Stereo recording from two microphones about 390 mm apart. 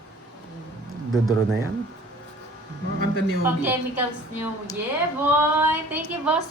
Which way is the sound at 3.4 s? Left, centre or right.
Centre.